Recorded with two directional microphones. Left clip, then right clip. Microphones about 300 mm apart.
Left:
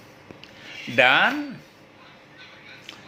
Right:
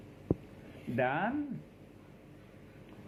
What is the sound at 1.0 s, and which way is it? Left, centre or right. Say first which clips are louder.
Speech: left 15 dB; left.